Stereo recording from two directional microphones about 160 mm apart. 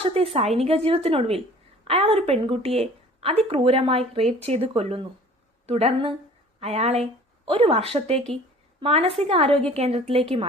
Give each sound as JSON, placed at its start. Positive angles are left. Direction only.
{"t": 0.0, "sound": "a woman's voice", "side_deg": -40}